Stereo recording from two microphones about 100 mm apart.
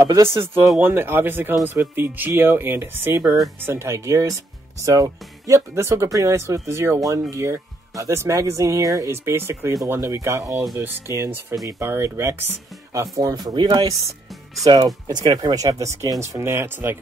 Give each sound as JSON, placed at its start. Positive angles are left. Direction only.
{"t": 0.0, "sound": "speech", "side_deg": -30}
{"t": 15.0, "sound": "speech", "side_deg": -45}